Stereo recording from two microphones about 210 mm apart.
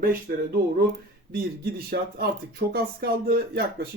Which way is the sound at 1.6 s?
45° right (ahead or behind).